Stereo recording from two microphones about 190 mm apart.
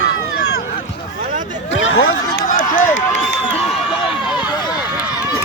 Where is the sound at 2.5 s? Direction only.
45° left (ahead or behind).